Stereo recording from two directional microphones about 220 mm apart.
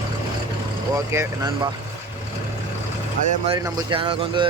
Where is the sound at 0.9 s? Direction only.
15° right (ahead or behind).